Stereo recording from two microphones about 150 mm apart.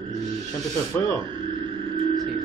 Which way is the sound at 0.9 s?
10° left (ahead or behind).